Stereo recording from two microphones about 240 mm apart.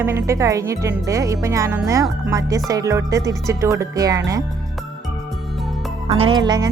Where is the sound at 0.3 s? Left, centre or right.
Centre.